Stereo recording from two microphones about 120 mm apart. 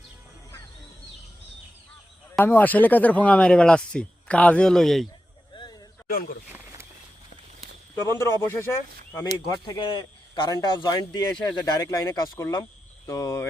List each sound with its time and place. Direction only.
2.4 s speech: 15° left (ahead or behind)
7.9 s speech: 20° left (ahead or behind)
9.5 s a man's voice: 35° left (ahead or behind)